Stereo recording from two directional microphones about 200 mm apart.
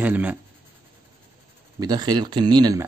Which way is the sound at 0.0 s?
5° right (ahead or behind).